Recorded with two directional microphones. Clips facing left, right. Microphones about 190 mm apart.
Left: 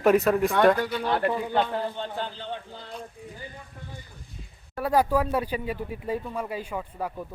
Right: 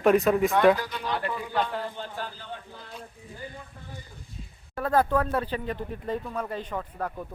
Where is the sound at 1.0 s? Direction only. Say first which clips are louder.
Left 5 dB; 60° left (ahead or behind).